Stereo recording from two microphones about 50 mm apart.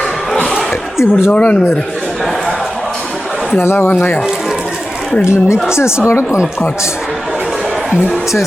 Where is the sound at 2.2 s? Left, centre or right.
Centre.